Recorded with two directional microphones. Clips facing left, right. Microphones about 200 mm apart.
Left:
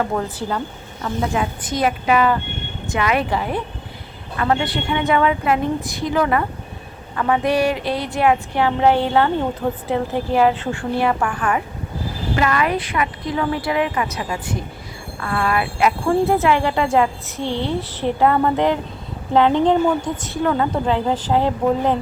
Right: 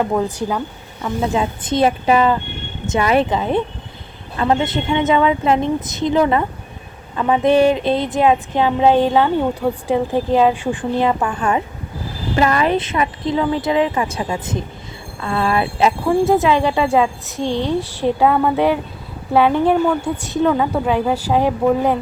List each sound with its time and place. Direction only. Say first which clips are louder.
0.0 s a woman's voice: right 4 dB; 15° right (ahead or behind)